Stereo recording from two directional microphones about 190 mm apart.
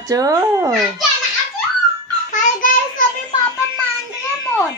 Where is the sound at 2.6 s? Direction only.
45° left (ahead or behind).